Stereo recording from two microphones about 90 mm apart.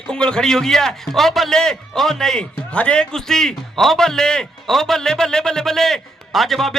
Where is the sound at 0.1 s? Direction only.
10° left (ahead or behind).